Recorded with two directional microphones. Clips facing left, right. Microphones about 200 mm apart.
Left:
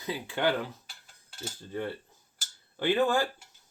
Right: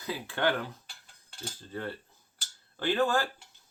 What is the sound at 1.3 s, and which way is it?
Cutlery, 15° left (ahead or behind).